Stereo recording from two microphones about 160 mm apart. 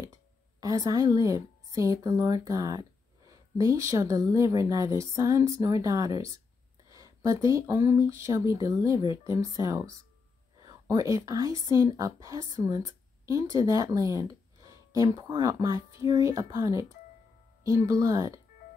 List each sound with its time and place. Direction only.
0.6 s a woman's voice: 20° right (ahead or behind)